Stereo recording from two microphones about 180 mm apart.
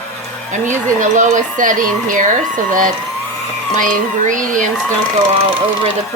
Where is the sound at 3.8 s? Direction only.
45° right (ahead or behind).